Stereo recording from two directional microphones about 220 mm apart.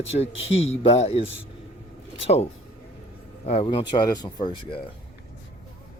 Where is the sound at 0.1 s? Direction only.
25° left (ahead or behind).